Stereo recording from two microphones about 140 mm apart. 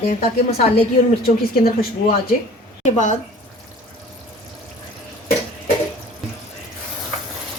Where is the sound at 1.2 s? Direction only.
90° left.